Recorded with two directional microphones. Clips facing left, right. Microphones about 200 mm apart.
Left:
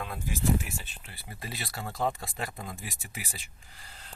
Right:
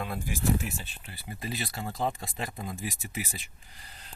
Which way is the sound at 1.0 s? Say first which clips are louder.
Right 4 dB; 20° right (ahead or behind).